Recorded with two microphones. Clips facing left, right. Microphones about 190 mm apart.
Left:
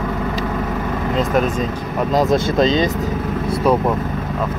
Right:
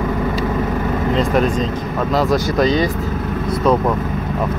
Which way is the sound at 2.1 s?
20° left (ahead or behind).